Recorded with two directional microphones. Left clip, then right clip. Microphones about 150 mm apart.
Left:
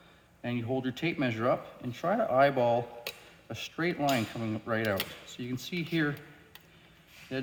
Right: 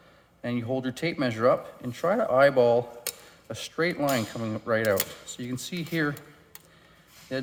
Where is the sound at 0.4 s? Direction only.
30° right (ahead or behind).